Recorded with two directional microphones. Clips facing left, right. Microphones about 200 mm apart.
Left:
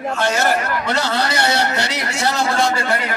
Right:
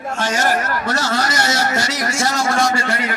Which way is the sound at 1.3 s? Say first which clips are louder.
Left 1 dB; 60° left (ahead or behind).